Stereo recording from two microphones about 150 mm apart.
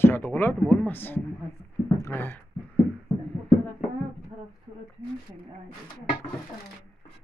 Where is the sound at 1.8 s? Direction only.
20° left (ahead or behind).